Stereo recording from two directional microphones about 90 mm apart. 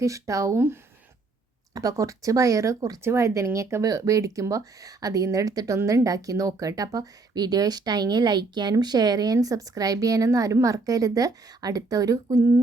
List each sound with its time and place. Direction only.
0.0 s speech: 35° right (ahead or behind)
1.7 s speech: 40° right (ahead or behind)